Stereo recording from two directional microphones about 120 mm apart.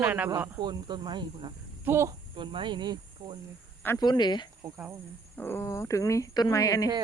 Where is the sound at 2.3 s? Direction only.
45° right (ahead or behind).